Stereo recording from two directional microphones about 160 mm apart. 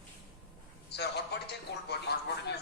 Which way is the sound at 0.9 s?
90° left.